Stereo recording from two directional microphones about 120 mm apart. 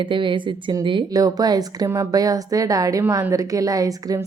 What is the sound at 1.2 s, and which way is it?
A woman's voice, 30° right (ahead or behind).